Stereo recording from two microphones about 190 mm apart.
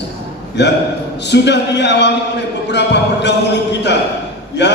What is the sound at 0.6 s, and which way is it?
A man's voice, 65° left (ahead or behind).